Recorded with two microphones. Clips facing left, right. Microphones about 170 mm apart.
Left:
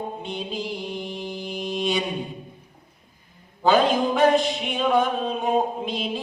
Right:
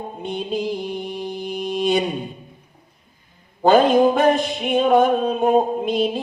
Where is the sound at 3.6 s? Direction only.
55° right (ahead or behind).